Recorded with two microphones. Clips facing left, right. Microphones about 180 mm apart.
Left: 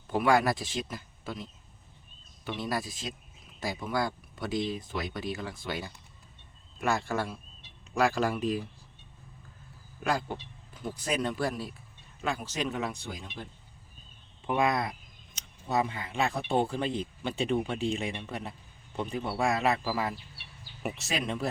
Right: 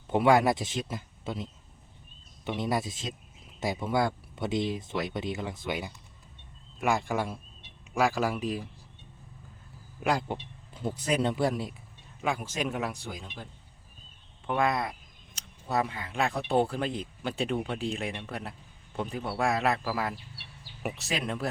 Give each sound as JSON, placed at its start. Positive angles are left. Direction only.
{"t": 0.1, "sound": "a man's voice", "side_deg": -20}
{"t": 10.0, "sound": "speech", "side_deg": -20}
{"t": 12.6, "sound": "a man's voice", "side_deg": -10}
{"t": 14.4, "sound": "a man's voice", "side_deg": 5}